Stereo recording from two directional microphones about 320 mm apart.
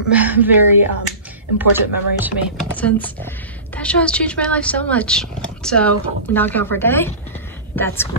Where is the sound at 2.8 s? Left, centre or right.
Centre.